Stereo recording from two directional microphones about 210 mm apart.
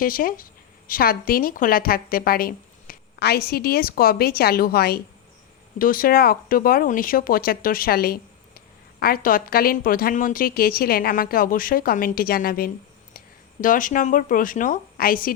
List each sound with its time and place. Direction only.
0.0 s speech: 40° left (ahead or behind)